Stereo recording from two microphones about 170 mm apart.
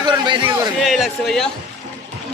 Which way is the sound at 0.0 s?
25° right (ahead or behind).